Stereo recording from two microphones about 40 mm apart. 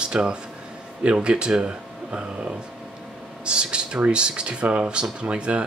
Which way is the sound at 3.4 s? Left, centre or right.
Right.